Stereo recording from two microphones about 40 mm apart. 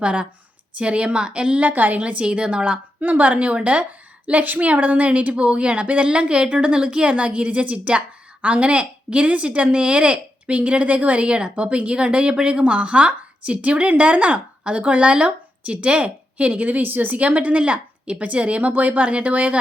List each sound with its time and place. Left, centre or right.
0.0 s a woman's voice: right
1.6 s a woman's voice: right
3.0 s a woman's voice: right
17.2 s a woman's voice: right